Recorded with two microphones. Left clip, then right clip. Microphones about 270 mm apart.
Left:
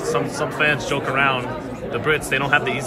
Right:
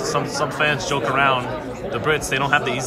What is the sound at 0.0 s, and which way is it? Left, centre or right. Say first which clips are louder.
Speech: even; centre.